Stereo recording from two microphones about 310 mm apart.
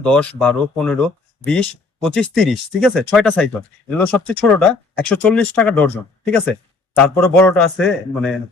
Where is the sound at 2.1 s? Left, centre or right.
Centre.